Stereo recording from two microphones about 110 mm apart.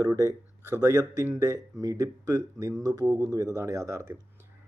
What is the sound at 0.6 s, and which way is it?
Speech, 25° right (ahead or behind).